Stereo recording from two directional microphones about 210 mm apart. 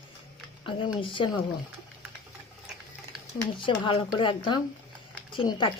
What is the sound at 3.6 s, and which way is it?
Speech, 25° left (ahead or behind).